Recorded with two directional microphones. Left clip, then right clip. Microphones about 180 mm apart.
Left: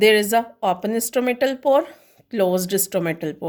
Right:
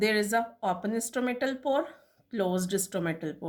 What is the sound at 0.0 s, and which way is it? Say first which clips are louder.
A woman's voice: left 11 dB; 50° left (ahead or behind).